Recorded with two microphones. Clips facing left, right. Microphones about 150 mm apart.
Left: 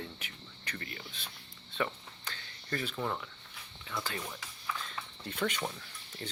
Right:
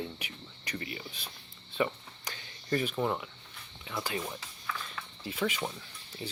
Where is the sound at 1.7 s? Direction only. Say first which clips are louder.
Right 4 dB; 10° right (ahead or behind).